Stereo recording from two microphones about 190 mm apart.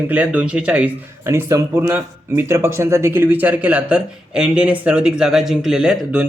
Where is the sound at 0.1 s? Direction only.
5° right (ahead or behind).